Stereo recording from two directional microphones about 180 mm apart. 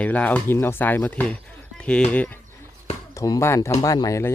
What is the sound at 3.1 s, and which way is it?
Speech, 20° left (ahead or behind).